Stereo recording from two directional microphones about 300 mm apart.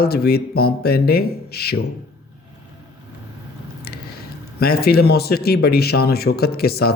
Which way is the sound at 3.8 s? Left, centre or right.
Left.